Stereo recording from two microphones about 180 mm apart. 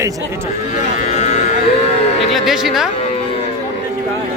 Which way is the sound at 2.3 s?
Centre (ahead or behind).